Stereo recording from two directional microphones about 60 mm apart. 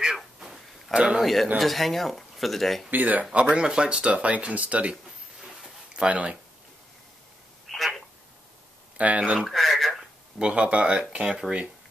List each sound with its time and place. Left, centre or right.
0.0 s a sound: centre
0.9 s speech: centre
1.2 s speech: centre
2.9 s speech: right
3.3 s speech: centre
6.0 s speech: right
7.6 s a sound: centre
8.9 s speech: right
9.4 s a sound: centre
10.4 s speech: centre